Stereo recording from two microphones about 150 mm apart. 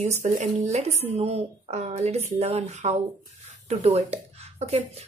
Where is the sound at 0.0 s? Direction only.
50° right (ahead or behind).